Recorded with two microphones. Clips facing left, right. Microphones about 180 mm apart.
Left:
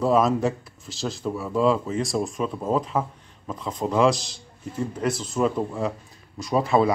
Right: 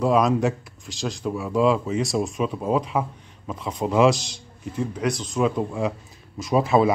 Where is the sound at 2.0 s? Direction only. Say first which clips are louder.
Right 2 dB; centre (ahead or behind).